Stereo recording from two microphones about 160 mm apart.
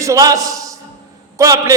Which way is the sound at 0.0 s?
20° right (ahead or behind).